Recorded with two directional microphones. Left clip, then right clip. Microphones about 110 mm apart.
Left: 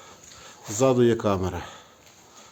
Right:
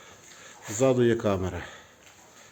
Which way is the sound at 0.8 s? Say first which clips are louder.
Left 2 dB; 20° left (ahead or behind).